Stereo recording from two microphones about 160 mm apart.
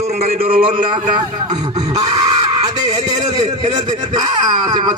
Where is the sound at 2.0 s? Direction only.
25° right (ahead or behind).